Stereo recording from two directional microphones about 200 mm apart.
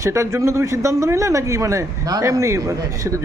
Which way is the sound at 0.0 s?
15° right (ahead or behind).